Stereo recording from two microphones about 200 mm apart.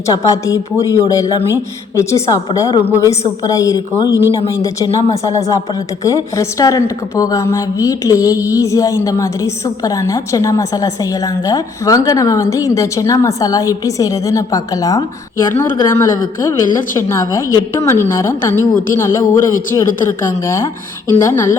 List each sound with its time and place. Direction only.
0.0 s a woman's voice: 15° left (ahead or behind)